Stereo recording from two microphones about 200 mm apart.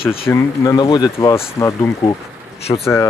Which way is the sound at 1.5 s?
15° left (ahead or behind).